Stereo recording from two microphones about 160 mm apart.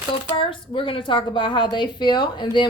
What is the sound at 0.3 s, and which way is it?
A woman's voice, 35° left (ahead or behind).